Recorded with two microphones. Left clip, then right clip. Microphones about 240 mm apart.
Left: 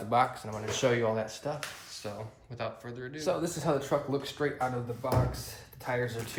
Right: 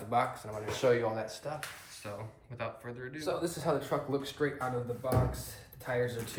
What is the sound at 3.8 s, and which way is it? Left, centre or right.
Speech, left.